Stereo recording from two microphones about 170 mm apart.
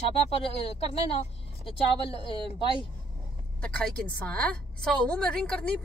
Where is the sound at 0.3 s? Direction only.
35° left (ahead or behind).